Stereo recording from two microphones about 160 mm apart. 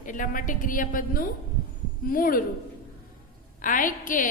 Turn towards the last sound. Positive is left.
turn(degrees=55)  # may be behind; listen again after turning